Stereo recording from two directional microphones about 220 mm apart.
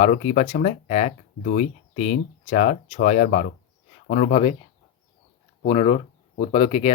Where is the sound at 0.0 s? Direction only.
30° left (ahead or behind).